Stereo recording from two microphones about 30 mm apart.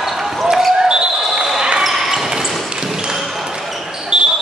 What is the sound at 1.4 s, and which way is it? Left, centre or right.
Basketball bounce, centre.